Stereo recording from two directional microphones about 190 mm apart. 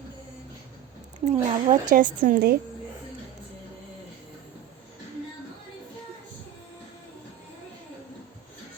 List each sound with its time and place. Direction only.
1.2 s a woman's voice: 35° right (ahead or behind)